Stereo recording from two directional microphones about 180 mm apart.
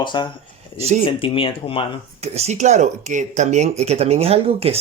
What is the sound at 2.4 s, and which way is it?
Speech, 40° right (ahead or behind).